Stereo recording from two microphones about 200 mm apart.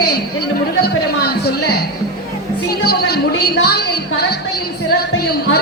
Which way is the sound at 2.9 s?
50° left (ahead or behind).